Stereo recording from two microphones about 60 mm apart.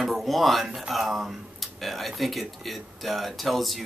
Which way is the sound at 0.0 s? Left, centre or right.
Centre.